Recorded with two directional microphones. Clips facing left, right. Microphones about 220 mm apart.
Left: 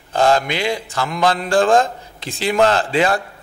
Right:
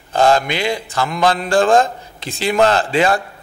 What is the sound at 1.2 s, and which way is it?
A man's voice, 20° right (ahead or behind).